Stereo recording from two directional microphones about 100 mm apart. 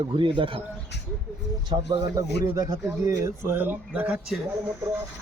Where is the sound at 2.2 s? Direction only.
35° right (ahead or behind); by 4.2 s 15° right (ahead or behind).